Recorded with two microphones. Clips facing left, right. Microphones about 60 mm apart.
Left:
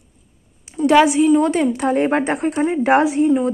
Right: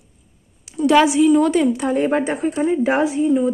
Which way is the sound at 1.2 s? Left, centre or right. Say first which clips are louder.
Even; left.